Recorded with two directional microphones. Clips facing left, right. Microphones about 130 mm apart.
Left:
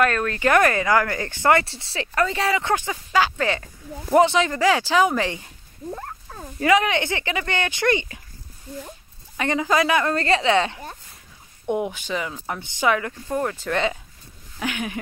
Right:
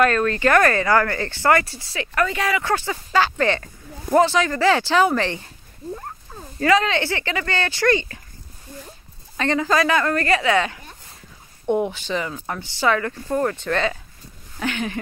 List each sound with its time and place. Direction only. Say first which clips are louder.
0.0 s speech: right 3 dB; 5° left (ahead or behind)
0.5 s speech: even; 15° left (ahead or behind)
2.7 s speech: right 1 dB; 15° left (ahead or behind)
4.6 s speech: right 2 dB; 10° left (ahead or behind)
6.6 s speech: right 1 dB; 15° left (ahead or behind)
9.4 s speech: right 1 dB; 15° left (ahead or behind)
11.7 s speech: right 3 dB; 10° left (ahead or behind)